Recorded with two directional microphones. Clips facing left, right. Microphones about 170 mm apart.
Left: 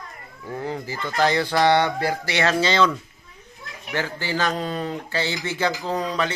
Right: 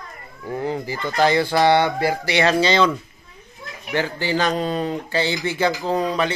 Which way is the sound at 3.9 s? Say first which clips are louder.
Right 4 dB; 20° right (ahead or behind).